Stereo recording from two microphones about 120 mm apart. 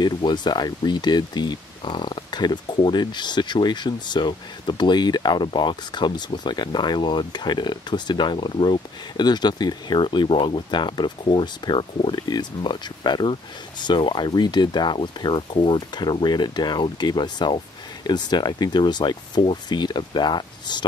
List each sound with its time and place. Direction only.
0.0 s speech: 40° left (ahead or behind)